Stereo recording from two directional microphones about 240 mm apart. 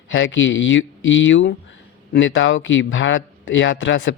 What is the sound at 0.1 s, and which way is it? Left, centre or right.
Speech, left.